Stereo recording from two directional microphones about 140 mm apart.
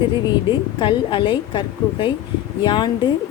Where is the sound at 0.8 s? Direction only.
35° left (ahead or behind).